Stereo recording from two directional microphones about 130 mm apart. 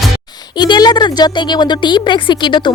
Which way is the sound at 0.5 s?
35° left (ahead or behind).